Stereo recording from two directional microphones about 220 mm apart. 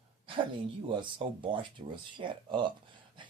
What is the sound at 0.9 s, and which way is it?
Speech, 20° right (ahead or behind).